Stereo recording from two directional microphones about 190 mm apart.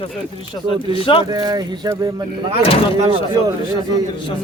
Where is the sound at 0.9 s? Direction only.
25° left (ahead or behind).